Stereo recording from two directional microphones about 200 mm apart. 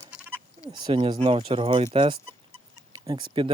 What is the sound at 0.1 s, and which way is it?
Bleat, 5° right (ahead or behind).